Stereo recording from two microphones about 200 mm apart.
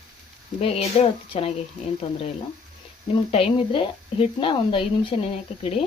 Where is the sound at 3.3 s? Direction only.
25° left (ahead or behind).